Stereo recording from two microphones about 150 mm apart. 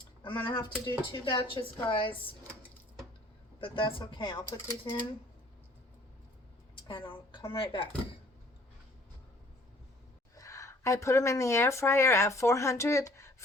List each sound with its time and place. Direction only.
0.2 s speech: 35° left (ahead or behind)
0.7 s speech: 15° left (ahead or behind)
1.2 s speech: 35° left (ahead or behind)
3.6 s speech: 35° left (ahead or behind)
6.8 s a woman's voice: 30° left (ahead or behind)
10.3 s speech: 20° left (ahead or behind)